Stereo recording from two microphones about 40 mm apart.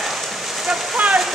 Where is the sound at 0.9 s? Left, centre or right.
Right.